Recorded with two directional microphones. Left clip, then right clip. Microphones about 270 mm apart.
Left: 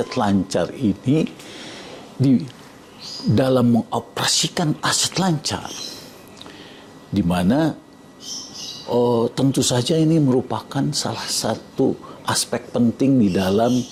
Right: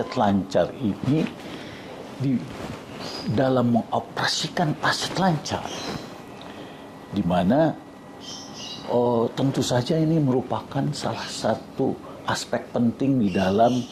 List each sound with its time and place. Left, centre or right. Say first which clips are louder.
0.1 s speech: left 1 dB; left
3.3 s speech: left 4 dB; left
7.1 s speech: left 1 dB; left
8.9 s speech: left 3 dB; left